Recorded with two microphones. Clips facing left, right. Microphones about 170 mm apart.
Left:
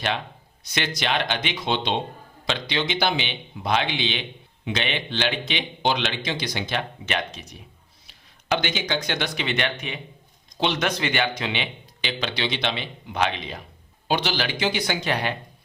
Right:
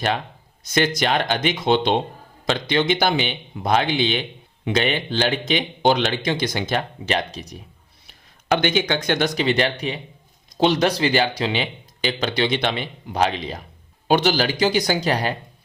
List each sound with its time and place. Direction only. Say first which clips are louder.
0.6 s speech: right 7 dB; 45° right (ahead or behind)
8.0 s speech: right 5 dB; 55° right (ahead or behind); by 13.6 s 35° right (ahead or behind)
14.1 s speech: right 6 dB; 50° right (ahead or behind)